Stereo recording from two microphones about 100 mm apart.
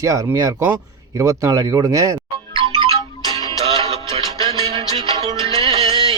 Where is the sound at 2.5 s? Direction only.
70° right (ahead or behind).